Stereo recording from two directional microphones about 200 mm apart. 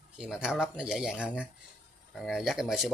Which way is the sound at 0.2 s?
5° right (ahead or behind).